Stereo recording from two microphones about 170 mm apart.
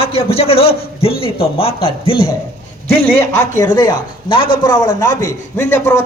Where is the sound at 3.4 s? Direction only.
20° left (ahead or behind).